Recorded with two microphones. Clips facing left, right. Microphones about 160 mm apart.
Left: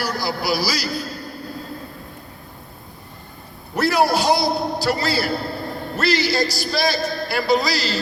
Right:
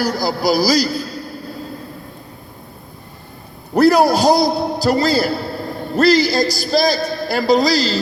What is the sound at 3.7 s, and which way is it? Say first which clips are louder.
A man's voice: right 6 dB; 40° right (ahead or behind).